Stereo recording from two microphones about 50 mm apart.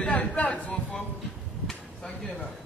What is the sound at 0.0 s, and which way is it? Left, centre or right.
Speech, left.